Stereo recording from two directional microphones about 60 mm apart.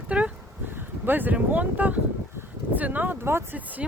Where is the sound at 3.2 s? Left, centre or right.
Right.